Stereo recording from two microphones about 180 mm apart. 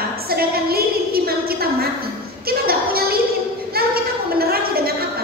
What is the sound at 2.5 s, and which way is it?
Music, 55° right (ahead or behind).